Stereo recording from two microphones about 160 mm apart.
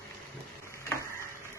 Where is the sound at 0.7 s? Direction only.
15° left (ahead or behind).